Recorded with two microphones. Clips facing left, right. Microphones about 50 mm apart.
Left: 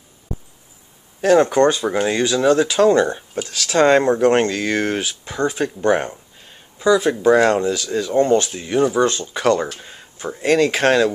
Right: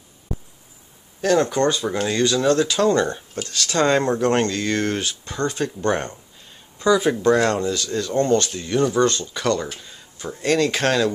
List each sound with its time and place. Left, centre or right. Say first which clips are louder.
1.2 s speech: left 5 dB; left
6.8 s speech: left 2 dB; centre
9.8 s speech: left 3 dB; left